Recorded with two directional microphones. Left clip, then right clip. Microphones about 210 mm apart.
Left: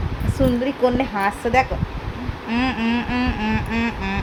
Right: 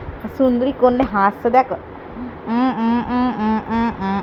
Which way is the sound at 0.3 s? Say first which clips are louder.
Right 4 dB; 20° right (ahead or behind).